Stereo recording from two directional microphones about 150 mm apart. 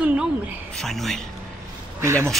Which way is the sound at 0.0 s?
10° right (ahead or behind).